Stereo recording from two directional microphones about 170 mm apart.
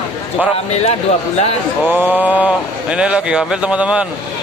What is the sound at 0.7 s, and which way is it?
Speech, 40° left (ahead or behind).